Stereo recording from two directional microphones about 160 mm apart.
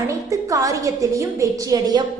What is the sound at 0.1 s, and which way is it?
A woman's voice, 20° right (ahead or behind).